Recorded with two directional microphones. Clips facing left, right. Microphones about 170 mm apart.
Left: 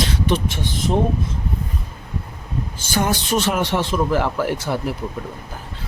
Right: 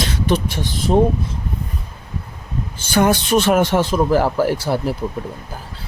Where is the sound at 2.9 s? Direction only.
60° right (ahead or behind); by 4.9 s 35° right (ahead or behind).